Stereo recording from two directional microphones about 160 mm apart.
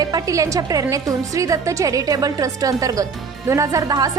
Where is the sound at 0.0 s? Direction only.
25° right (ahead or behind).